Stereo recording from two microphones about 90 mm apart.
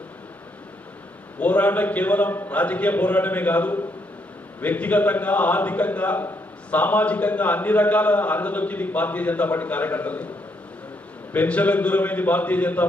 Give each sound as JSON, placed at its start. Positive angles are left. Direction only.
{"t": 1.4, "sound": "a man's voice", "side_deg": 15}
{"t": 11.3, "sound": "a man's voice", "side_deg": 15}